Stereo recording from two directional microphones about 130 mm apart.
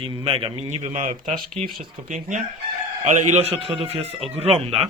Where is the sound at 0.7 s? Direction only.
65° right (ahead or behind).